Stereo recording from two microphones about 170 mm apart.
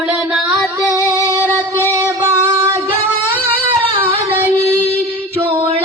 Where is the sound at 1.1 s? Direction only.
15° right (ahead or behind).